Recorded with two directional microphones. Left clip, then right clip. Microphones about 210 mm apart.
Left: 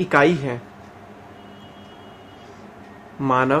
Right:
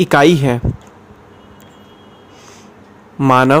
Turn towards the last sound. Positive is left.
turn(degrees=-50)  # may be behind; listen again after turning